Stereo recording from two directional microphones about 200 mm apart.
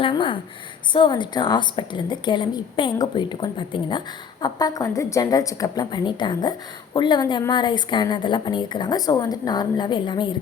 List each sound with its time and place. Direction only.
0.0 s a woman's voice: 25° left (ahead or behind)